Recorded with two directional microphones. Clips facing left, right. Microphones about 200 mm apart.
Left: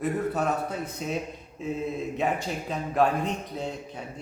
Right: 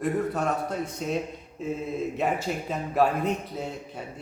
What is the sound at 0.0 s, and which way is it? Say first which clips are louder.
A man's voice: even; centre (ahead or behind).